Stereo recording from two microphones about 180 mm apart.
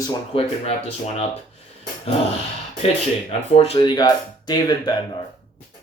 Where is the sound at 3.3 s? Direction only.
35° left (ahead or behind).